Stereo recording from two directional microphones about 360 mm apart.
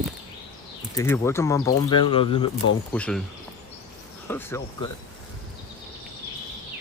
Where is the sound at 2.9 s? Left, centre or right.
Centre.